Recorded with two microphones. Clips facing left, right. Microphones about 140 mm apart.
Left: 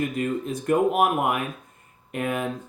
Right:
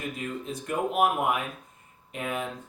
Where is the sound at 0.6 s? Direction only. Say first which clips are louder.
Left 5 dB; 55° left (ahead or behind).